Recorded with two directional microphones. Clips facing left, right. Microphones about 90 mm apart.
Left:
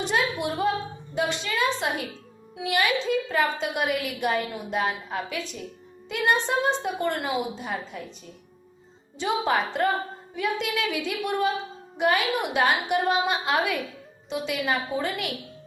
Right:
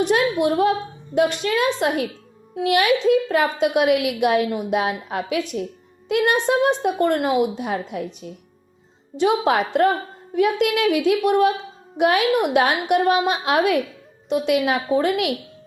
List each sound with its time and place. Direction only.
0.0 s a woman's voice: 60° right (ahead or behind)
9.1 s a woman's voice: 65° right (ahead or behind)